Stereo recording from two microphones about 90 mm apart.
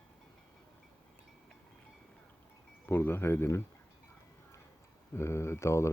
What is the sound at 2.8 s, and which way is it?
Speech, 25° left (ahead or behind).